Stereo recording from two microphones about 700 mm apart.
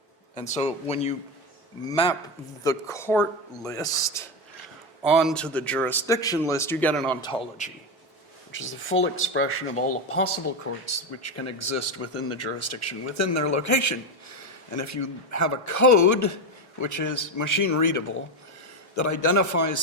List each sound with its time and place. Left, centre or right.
0.3 s a man's voice: centre